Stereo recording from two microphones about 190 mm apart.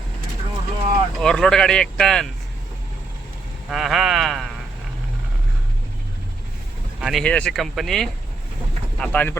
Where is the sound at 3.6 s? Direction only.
Centre (ahead or behind).